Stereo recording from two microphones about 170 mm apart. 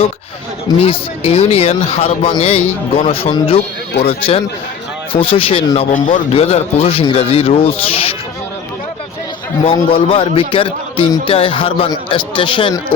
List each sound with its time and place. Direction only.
0.8 s a man's voice: 35° left (ahead or behind)
9.6 s a man's voice: 30° left (ahead or behind)